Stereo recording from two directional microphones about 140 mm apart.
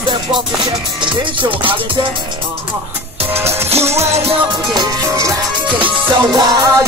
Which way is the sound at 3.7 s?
50° right (ahead or behind).